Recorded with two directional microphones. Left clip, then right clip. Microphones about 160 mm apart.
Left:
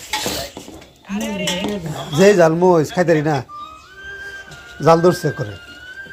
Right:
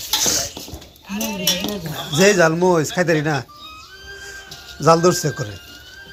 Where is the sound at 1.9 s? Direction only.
5° right (ahead or behind).